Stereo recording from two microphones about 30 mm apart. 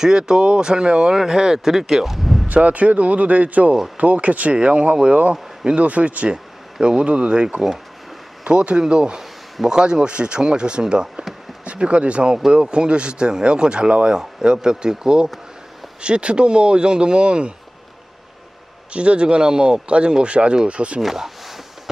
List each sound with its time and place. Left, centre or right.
0.0 s speech: right
1.1 s speech: centre
2.6 s speech: right
4.5 s speech: right
6.8 s speech: right
10.1 s speech: right
11.6 s speech: right
18.9 s speech: right
21.0 s a sound: centre